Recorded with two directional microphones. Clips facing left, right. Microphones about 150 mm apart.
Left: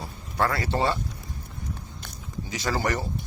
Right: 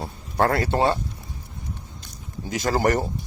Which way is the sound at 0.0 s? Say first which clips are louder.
Right 4 dB; 50° right (ahead or behind).